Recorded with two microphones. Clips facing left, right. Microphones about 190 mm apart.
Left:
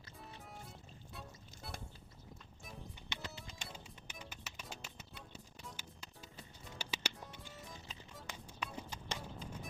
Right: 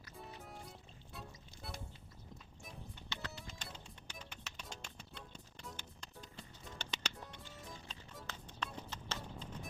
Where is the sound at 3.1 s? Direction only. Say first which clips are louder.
Right 1 dB; 20° left (ahead or behind).